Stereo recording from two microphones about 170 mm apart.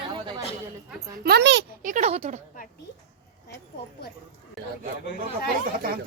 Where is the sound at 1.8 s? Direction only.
45° right (ahead or behind).